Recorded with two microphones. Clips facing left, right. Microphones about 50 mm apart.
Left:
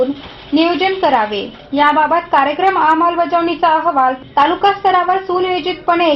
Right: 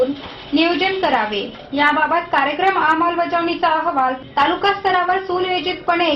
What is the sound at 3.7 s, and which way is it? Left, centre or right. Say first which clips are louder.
Speech: left 5 dB; centre.